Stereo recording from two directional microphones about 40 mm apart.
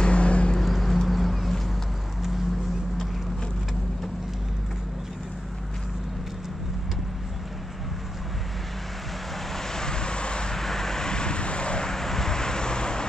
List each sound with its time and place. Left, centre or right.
0.0 s vehicle: left
0.6 s boat: centre
9.5 s vehicle: centre
10.5 s vehicle: centre; by 11.9 s left
11.9 s vehicle: centre